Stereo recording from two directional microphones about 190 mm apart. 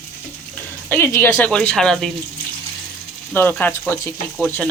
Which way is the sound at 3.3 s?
10° left (ahead or behind).